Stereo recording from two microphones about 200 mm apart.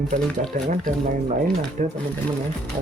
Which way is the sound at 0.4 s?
35° right (ahead or behind).